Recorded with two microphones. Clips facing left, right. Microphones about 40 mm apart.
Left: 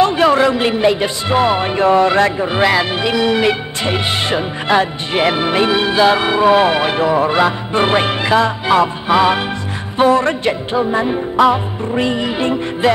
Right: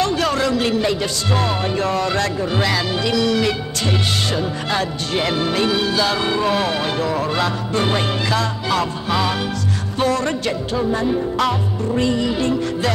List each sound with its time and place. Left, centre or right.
0.0 s speech: left